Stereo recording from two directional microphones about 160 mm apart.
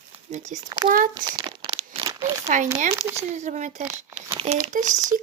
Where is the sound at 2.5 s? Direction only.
55° right (ahead or behind).